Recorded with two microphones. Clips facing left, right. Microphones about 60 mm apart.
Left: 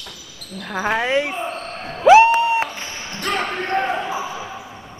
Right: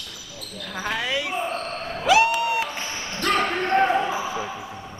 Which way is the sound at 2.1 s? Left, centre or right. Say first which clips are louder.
Left 8 dB; left.